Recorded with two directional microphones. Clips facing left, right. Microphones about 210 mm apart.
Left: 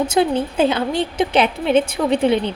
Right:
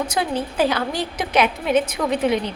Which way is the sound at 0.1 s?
25° left (ahead or behind).